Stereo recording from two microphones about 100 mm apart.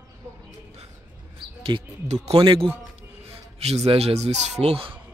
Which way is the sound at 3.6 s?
90° right.